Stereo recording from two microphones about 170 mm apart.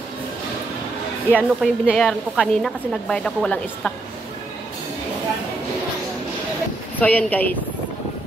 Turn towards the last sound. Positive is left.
turn(degrees=10)  # may be behind; listen again after turning